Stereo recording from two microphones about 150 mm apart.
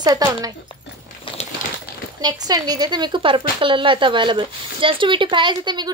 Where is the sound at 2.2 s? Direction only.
25° right (ahead or behind).